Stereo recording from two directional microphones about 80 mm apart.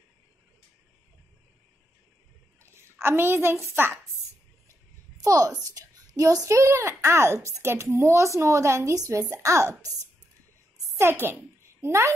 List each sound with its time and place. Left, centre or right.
2.6 s a child's voice: right
5.2 s a woman's voice: right
11.0 s a child's voice: right